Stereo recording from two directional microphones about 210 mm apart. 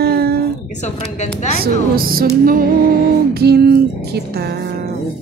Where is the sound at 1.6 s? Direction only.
45° right (ahead or behind).